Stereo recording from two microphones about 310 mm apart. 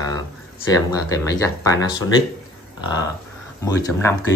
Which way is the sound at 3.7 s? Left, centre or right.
Centre.